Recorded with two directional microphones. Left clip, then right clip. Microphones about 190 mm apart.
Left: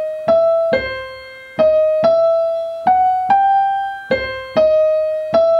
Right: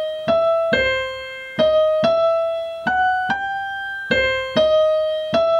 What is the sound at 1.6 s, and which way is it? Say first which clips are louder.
Keyboard: left 3 dB; 50° right (ahead or behind).